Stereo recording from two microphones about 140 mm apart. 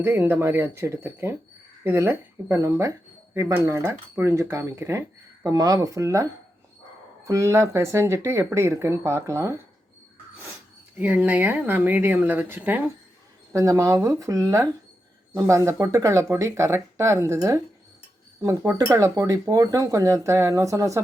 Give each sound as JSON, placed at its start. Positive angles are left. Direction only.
{"t": 0.0, "sound": "speech", "side_deg": -15}
{"t": 7.3, "sound": "speech", "side_deg": -20}
{"t": 10.9, "sound": "speech", "side_deg": -10}